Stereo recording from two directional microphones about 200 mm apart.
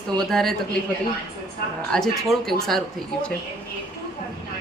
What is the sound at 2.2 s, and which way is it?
Speech, centre (ahead or behind).